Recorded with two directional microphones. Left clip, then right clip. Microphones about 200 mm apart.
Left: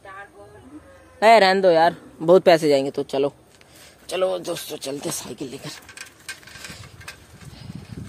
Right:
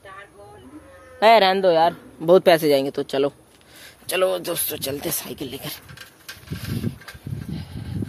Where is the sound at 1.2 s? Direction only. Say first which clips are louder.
Left 1 dB; centre (ahead or behind).